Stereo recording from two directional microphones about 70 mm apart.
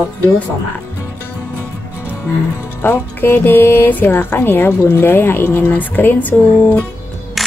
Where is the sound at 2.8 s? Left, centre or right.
Left.